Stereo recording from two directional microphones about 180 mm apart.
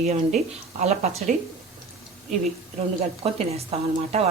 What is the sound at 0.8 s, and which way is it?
Speech, 35° right (ahead or behind).